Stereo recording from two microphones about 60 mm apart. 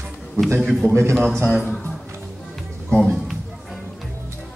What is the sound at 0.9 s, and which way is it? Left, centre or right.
Speech, right.